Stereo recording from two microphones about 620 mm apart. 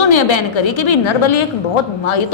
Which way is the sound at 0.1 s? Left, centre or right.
Left.